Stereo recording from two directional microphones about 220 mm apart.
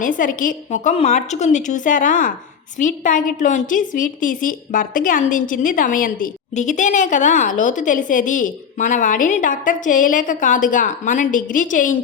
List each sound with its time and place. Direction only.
0.0 s a woman's voice: 35° left (ahead or behind)